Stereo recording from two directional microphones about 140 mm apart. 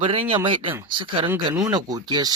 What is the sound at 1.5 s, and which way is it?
Speech, 25° right (ahead or behind).